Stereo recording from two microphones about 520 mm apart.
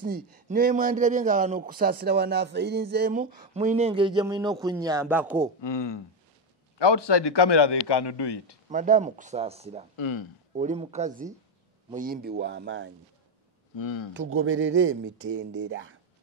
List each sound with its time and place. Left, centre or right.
0.0 s a man's voice: centre
5.6 s speech: left
8.6 s a man's voice: centre
9.9 s speech: left
10.5 s a man's voice: centre
13.7 s speech: left
14.1 s speech: right